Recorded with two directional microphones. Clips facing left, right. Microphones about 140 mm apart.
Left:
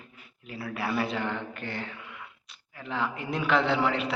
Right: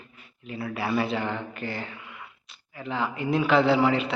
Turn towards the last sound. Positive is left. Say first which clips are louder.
# right 5 dB
turn(degrees=0)  # may be behind; listen again after turning